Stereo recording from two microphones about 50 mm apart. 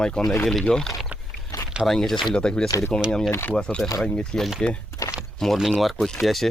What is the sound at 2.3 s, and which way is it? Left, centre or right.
Speech, centre.